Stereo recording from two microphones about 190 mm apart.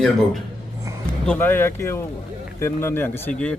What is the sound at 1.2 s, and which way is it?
Speech, 5° left (ahead or behind).